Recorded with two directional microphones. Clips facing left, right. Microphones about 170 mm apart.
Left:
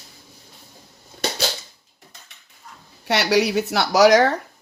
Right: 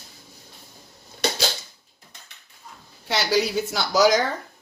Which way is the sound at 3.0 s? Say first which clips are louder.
Left 4 dB; 70° left (ahead or behind).